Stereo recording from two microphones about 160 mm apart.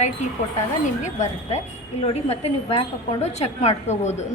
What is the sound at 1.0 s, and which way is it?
A woman's voice, 50° left (ahead or behind).